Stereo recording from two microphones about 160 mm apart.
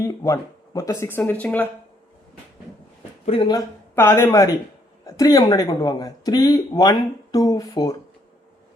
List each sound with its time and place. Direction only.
0.0 s speech: 20° left (ahead or behind)
3.2 s speech: 30° left (ahead or behind)
3.9 s speech: 15° left (ahead or behind)